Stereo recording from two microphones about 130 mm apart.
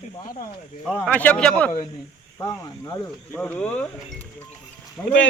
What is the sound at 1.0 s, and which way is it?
Speech, 10° left (ahead or behind).